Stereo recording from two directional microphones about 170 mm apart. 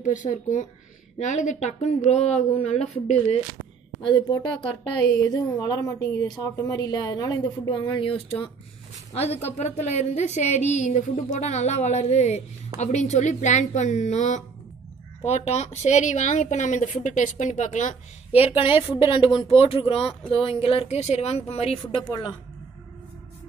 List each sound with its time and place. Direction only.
0.0 s a woman's voice: 50° left (ahead or behind)
4.0 s a woman's voice: 25° left (ahead or behind)